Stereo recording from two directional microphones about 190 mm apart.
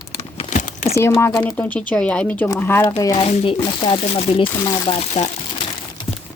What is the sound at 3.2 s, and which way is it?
Speech, 30° left (ahead or behind).